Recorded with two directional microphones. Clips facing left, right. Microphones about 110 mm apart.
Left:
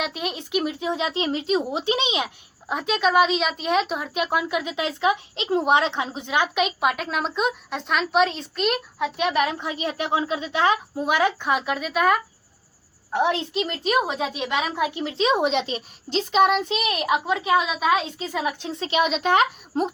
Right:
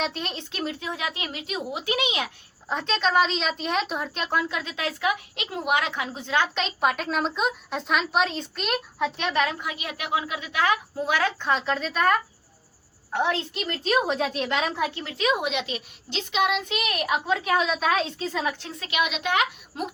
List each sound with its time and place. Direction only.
0.0 s speech: 10° left (ahead or behind)
9.6 s a woman's voice: 30° left (ahead or behind); by 12.2 s 5° left (ahead or behind)
13.1 s a woman's voice: 20° left (ahead or behind); by 16.7 s 35° left (ahead or behind)
16.8 s speech: 20° left (ahead or behind)
18.8 s a woman's voice: 30° left (ahead or behind)